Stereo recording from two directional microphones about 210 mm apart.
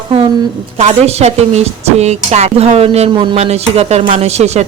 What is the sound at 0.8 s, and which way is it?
A woman's voice, 30° right (ahead or behind).